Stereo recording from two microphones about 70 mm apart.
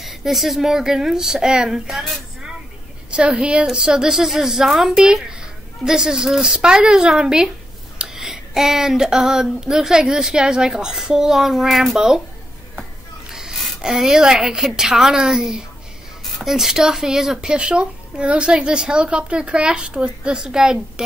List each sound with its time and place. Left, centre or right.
0.0 s speech: centre
3.1 s speech: centre
13.3 s a sound: centre
13.7 s speech: centre